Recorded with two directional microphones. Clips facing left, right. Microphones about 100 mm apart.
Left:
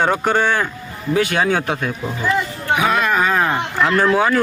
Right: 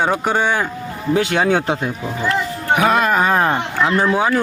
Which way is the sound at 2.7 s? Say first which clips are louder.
Right 2 dB; 45° right (ahead or behind).